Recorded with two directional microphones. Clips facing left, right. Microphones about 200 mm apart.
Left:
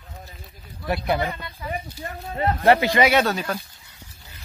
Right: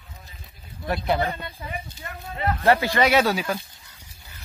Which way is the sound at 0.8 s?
5° left (ahead or behind).